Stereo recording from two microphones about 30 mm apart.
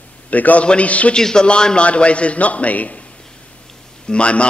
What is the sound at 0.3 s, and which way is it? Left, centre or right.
Speech, left.